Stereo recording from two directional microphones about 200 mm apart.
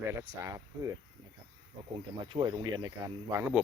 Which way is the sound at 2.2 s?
25° right (ahead or behind).